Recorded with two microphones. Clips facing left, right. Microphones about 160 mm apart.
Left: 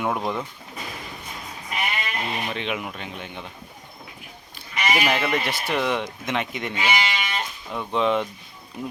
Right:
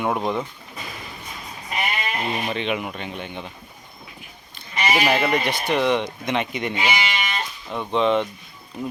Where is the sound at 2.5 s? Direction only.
Centre (ahead or behind).